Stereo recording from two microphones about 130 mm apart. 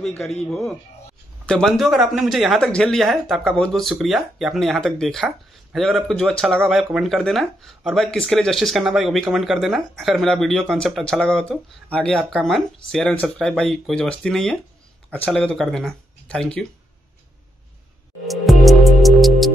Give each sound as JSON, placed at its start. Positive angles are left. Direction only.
{"t": 0.5, "sound": "speech", "side_deg": 5}
{"t": 18.2, "sound": "music", "side_deg": 0}